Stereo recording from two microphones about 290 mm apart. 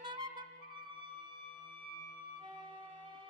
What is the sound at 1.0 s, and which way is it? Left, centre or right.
Music, left.